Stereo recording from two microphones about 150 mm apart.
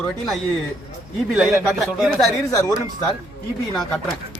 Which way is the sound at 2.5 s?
20° left (ahead or behind).